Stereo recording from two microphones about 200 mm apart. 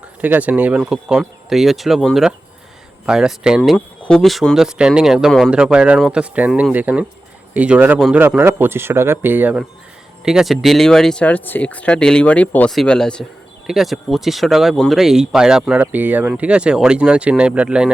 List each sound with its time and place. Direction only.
0.2 s a man's voice: 10° right (ahead or behind)